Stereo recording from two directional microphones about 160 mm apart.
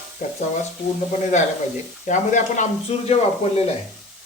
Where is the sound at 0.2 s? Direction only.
45° left (ahead or behind).